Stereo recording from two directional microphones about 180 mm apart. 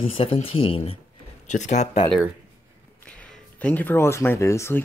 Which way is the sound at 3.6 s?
10° left (ahead or behind).